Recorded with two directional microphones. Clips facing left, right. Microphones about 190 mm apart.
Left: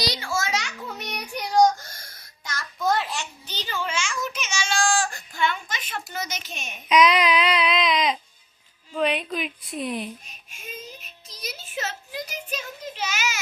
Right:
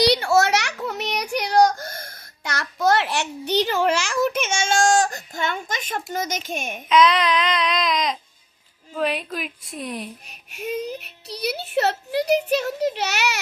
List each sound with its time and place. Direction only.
0.0 s child singing: 65° right (ahead or behind); by 6.0 s 45° right (ahead or behind)
6.1 s a child's voice: 45° right (ahead or behind)
6.8 s a sound: 10° left (ahead or behind)
9.0 s a woman's voice: centre (ahead or behind)
10.2 s a child's voice: 65° right (ahead or behind)